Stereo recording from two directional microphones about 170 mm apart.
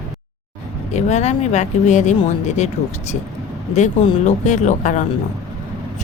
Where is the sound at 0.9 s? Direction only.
40° left (ahead or behind).